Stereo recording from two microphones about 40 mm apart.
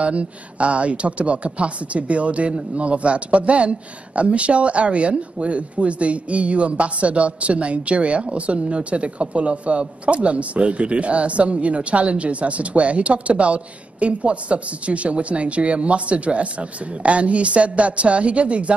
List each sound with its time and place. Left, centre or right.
0.0 s speech: right